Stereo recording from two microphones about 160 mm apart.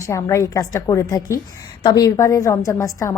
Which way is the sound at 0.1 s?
20° left (ahead or behind).